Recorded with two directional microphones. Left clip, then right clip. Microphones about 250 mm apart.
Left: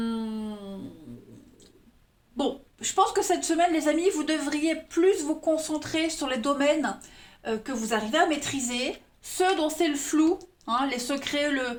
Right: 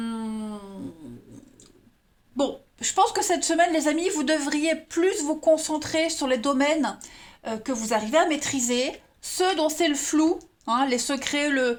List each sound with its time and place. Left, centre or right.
2.3 s a woman's voice: right